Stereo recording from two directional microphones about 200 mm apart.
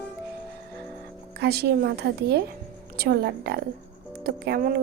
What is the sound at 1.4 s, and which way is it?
A woman's voice, 55° right (ahead or behind).